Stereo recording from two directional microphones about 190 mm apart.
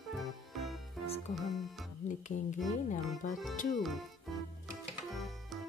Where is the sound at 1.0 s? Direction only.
30° left (ahead or behind).